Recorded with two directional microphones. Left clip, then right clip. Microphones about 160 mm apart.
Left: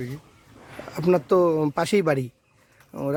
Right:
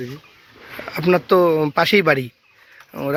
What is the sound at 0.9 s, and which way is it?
Speech, 5° left (ahead or behind).